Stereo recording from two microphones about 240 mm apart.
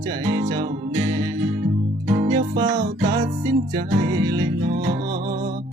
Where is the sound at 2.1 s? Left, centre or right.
Right.